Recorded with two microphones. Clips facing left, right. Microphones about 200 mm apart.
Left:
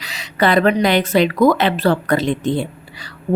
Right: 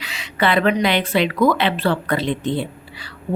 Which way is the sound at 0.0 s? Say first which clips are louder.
Left 3 dB; 40° left (ahead or behind).